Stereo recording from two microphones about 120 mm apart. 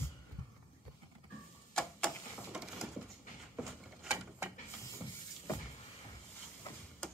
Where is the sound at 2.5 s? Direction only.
5° right (ahead or behind).